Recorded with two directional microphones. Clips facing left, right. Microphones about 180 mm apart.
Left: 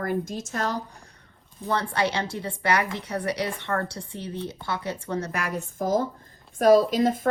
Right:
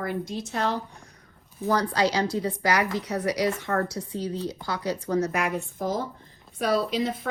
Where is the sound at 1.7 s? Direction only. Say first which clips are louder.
Right 2 dB; 25° left (ahead or behind).